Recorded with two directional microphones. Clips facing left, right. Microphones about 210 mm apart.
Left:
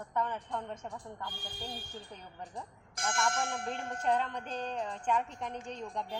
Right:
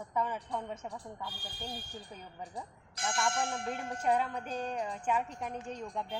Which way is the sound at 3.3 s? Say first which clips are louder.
Right 1 dB; 10° right (ahead or behind).